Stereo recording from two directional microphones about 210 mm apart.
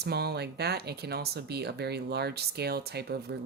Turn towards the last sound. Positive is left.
turn(degrees=-50)  # may be behind; listen again after turning